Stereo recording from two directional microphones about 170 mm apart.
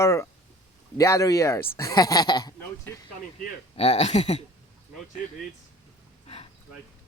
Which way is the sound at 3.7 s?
40° left (ahead or behind).